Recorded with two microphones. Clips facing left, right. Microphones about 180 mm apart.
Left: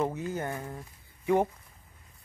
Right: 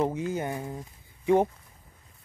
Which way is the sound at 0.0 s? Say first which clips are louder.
Right 3 dB; 20° right (ahead or behind).